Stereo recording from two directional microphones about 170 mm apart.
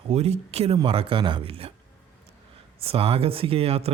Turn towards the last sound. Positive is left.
turn(degrees=-35)  # may be behind; listen again after turning